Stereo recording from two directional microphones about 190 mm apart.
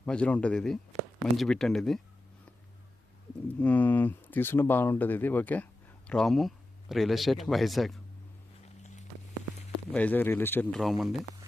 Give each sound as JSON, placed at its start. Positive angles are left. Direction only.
{"t": 0.0, "sound": "speech", "side_deg": 5}
{"t": 3.6, "sound": "speech", "side_deg": 10}
{"t": 8.6, "sound": "walk", "side_deg": 40}
{"t": 9.9, "sound": "speech", "side_deg": 10}